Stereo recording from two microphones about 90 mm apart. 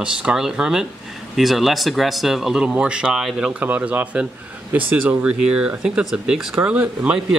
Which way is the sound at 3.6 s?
20° right (ahead or behind).